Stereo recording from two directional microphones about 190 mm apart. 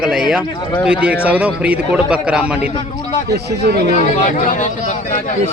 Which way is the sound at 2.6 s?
30° left (ahead or behind).